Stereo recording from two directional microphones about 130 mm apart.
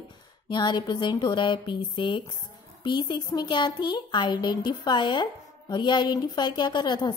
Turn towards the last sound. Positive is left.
turn(degrees=35)  # may be behind; listen again after turning